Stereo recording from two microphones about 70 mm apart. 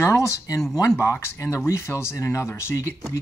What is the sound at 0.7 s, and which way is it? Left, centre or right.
Speech, left.